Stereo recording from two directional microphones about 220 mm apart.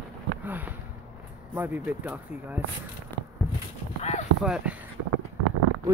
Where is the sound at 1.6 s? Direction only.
5° right (ahead or behind).